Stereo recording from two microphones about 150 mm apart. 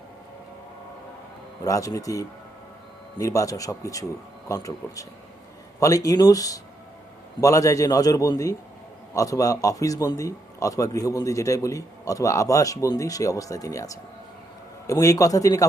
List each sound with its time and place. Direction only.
1.6 s a man's voice: 20° left (ahead or behind)